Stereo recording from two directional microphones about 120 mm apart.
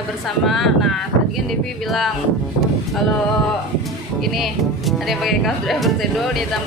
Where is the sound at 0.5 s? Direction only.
Centre (ahead or behind).